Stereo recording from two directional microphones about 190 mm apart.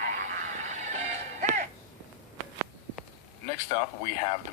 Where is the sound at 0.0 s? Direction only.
40° right (ahead or behind).